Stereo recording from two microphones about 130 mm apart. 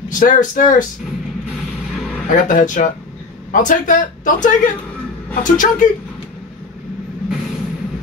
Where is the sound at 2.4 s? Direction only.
90° left.